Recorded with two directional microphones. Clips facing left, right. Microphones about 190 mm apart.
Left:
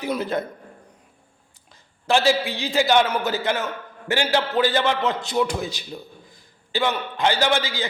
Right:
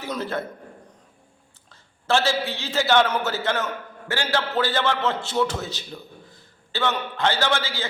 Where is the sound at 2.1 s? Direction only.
15° left (ahead or behind).